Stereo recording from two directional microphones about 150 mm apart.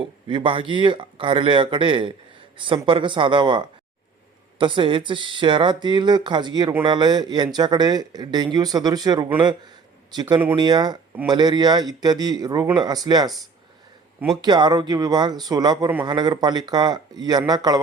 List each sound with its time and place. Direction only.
0.0 s speech: 35° right (ahead or behind)
14.4 s speech: 30° right (ahead or behind)